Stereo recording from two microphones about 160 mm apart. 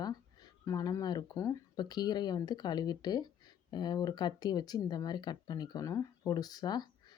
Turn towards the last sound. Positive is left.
turn(degrees=25)  # may be behind; listen again after turning